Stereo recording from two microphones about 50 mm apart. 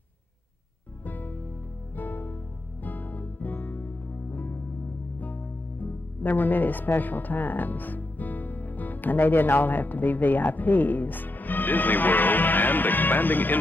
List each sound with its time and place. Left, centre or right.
1.0 s music: left
5.2 s speech: left